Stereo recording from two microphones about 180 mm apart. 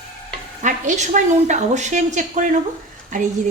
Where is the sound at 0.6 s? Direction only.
45° right (ahead or behind).